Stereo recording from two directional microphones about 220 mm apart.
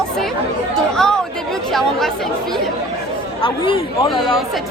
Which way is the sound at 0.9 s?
Centre (ahead or behind).